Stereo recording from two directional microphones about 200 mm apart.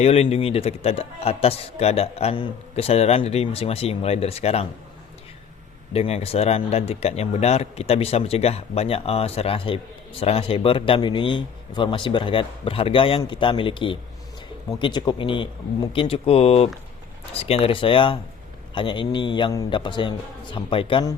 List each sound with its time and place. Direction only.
0.0 s a man's voice: 30° left (ahead or behind)
5.9 s speech: 30° left (ahead or behind)